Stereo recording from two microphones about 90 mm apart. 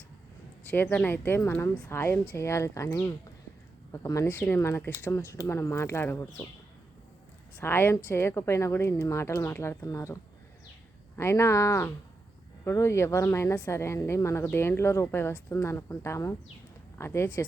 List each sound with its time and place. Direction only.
0.6 s a woman's voice: 20° left (ahead or behind); by 4.4 s 35° left (ahead or behind)
4.4 s a woman's voice: 20° left (ahead or behind)
7.6 s a woman's voice: 25° left (ahead or behind)
11.2 s a woman's voice: 30° left (ahead or behind)